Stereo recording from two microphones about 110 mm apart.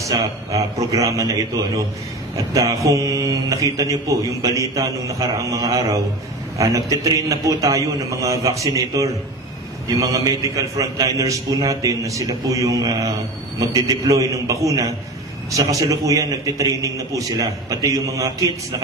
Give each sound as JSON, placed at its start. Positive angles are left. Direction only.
{"t": 0.0, "sound": "a man's voice", "side_deg": -35}